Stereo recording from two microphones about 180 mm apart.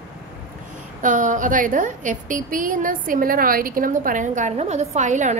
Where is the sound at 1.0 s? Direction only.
45° right (ahead or behind).